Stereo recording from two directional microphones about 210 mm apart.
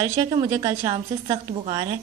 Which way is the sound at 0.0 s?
20° right (ahead or behind).